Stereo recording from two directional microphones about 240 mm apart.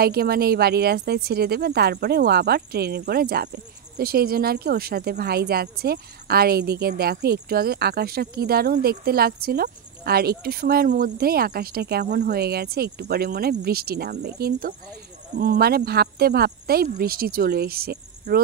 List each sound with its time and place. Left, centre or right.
0.0 s speech: right